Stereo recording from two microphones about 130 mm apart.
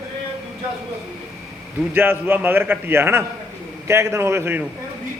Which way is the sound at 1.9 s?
15° right (ahead or behind).